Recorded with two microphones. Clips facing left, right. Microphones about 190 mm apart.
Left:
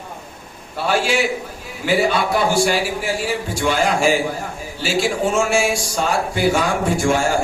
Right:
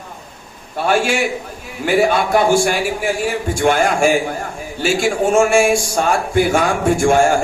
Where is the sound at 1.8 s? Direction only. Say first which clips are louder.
Right 3 dB; 50° right (ahead or behind).